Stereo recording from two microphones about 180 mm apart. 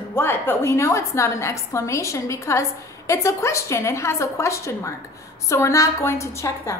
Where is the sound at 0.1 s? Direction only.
10° left (ahead or behind).